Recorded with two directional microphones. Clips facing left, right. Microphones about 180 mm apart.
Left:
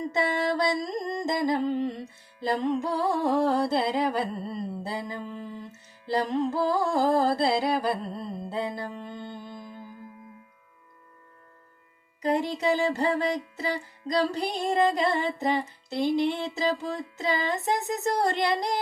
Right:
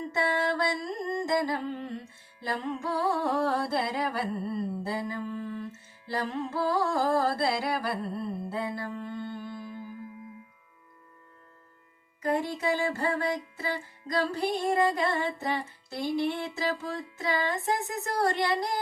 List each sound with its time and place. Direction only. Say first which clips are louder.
0.0 s music: left 2 dB; 20° left (ahead or behind)
9.6 s music: right 2 dB; 35° left (ahead or behind)
12.2 s music: left 3 dB; 20° left (ahead or behind)